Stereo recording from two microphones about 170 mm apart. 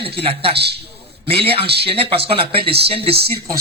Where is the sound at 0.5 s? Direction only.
75° right (ahead or behind).